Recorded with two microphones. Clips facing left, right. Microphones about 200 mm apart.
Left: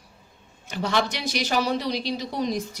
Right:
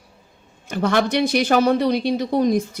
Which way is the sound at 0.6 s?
50° right (ahead or behind).